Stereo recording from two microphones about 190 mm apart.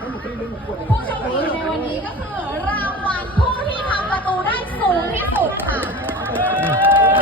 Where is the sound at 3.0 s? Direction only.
10° left (ahead or behind).